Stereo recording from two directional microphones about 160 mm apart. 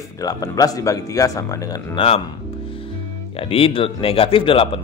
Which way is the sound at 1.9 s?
35° left (ahead or behind).